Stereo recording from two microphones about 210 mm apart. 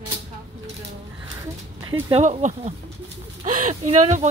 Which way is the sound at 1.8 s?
25° right (ahead or behind).